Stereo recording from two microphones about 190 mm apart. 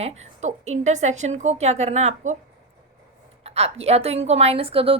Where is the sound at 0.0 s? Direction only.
35° right (ahead or behind).